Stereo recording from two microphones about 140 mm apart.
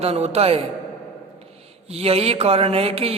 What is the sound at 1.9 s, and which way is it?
Speech, 45° right (ahead or behind).